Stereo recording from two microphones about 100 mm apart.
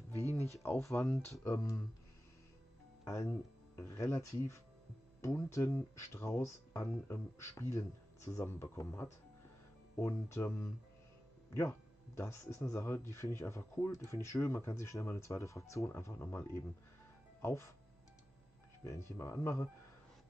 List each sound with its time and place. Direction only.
0.1 s speech: 25° left (ahead or behind)
3.1 s speech: 25° left (ahead or behind)
12.2 s speech: 30° left (ahead or behind)
18.9 s speech: 30° left (ahead or behind)